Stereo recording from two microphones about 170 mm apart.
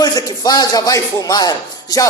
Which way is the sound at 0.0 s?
25° left (ahead or behind).